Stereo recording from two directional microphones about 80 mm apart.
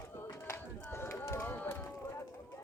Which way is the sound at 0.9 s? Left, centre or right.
Left.